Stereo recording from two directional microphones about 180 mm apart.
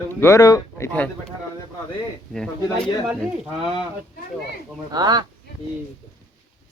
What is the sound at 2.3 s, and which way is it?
Speech, 5° left (ahead or behind).